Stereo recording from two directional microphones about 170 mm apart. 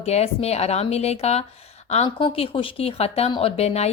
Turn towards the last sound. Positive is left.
turn(degrees=40)  # may be behind; listen again after turning